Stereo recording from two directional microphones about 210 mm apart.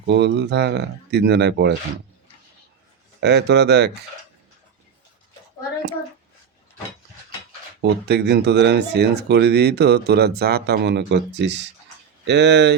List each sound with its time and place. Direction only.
0.0 s speech: 55° right (ahead or behind)
3.2 s speech: 55° right (ahead or behind)
7.8 s speech: 55° right (ahead or behind)